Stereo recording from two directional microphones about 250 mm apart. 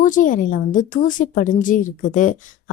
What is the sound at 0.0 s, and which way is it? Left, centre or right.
A woman's voice, left.